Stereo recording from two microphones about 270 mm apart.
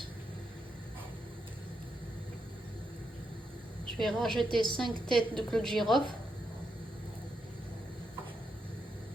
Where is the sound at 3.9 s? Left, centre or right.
Centre.